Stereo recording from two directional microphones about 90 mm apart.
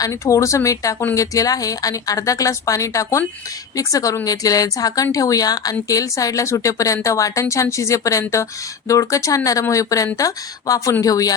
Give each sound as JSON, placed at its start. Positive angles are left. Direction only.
{"t": 0.0, "sound": "speech", "side_deg": 35}